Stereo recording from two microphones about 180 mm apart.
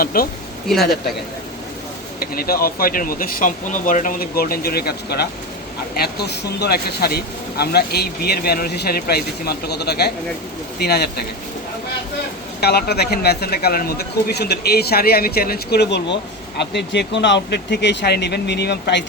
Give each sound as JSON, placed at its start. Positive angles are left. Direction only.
{"t": 0.0, "sound": "speech", "side_deg": 55}
{"t": 0.7, "sound": "speech", "side_deg": 0}
{"t": 2.1, "sound": "speech", "side_deg": 55}
{"t": 12.5, "sound": "speech", "side_deg": 65}